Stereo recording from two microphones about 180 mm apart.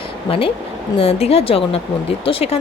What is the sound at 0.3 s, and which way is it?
A woman's voice, 30° left (ahead or behind).